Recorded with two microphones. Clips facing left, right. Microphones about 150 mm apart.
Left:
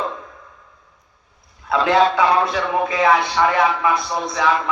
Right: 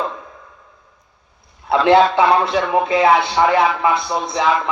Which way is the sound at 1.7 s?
25° right (ahead or behind).